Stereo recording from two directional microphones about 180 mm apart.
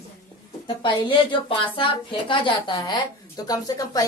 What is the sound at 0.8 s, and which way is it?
A woman's voice, 25° left (ahead or behind).